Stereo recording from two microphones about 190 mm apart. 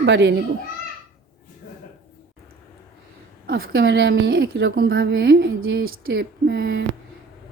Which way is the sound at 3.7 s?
65° right (ahead or behind).